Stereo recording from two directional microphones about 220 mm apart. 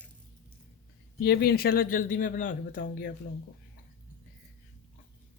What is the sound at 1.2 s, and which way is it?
Speech, 45° left (ahead or behind).